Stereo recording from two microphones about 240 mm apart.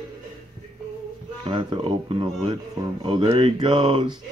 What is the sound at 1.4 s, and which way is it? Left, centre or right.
Speech, centre.